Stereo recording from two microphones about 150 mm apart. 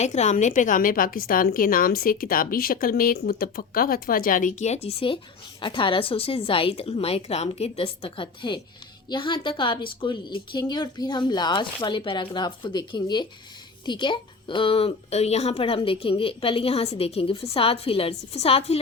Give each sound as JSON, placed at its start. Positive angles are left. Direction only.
{"t": 0.0, "sound": "a woman's voice", "side_deg": 50}